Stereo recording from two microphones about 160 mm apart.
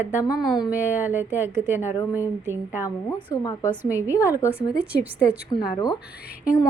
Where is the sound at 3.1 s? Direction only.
25° left (ahead or behind).